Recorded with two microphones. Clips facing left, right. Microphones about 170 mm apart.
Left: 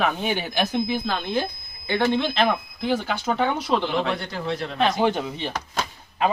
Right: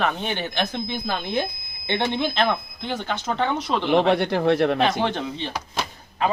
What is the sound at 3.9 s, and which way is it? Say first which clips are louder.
Speech: right 7 dB; 70° right (ahead or behind).